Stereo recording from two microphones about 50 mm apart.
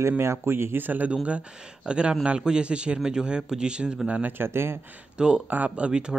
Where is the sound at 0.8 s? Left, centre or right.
Right; by 4.0 s centre.